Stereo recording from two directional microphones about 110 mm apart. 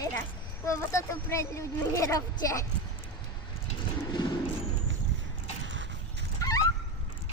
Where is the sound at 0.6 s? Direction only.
25° left (ahead or behind).